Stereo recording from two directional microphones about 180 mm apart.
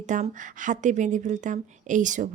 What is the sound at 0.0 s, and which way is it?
A woman's voice, 45° right (ahead or behind).